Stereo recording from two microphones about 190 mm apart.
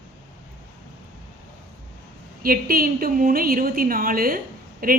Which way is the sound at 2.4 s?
50° right (ahead or behind).